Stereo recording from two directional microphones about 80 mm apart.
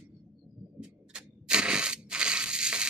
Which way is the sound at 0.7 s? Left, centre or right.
Centre.